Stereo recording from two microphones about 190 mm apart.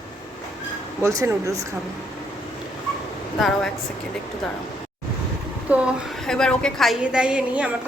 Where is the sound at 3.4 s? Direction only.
Centre (ahead or behind).